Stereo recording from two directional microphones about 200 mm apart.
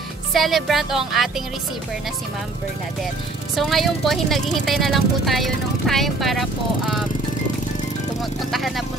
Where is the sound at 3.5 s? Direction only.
Centre (ahead or behind).